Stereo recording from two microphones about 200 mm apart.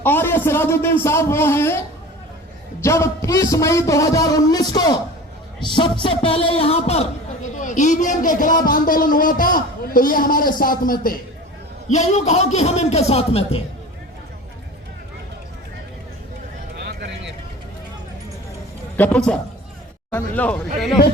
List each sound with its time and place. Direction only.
0.0 s a man's voice: 10° left (ahead or behind)
2.8 s a man's voice: 15° left (ahead or behind); by 11.2 s 45° left (ahead or behind)
11.9 s a man's voice: 35° left (ahead or behind)
16.7 s a sound: 50° right (ahead or behind)
18.9 s a man's voice: 5° left (ahead or behind)